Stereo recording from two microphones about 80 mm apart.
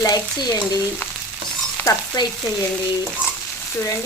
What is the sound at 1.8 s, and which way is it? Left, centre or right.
Stir, left.